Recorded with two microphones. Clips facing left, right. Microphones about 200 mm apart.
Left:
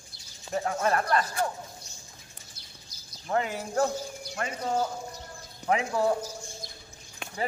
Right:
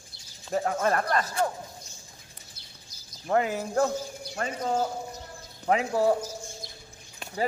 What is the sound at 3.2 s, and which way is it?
A man's voice, 40° right (ahead or behind).